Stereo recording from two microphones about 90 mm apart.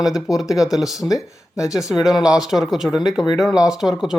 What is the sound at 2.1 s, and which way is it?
Speech, 50° left (ahead or behind).